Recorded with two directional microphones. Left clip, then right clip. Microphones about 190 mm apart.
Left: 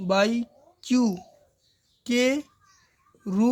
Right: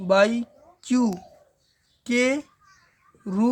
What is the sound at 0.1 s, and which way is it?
Speech, 5° left (ahead or behind).